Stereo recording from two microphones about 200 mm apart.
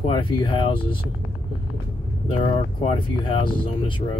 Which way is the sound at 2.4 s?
30° left (ahead or behind).